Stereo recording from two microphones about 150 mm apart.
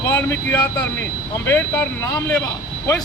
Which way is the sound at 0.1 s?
10° left (ahead or behind).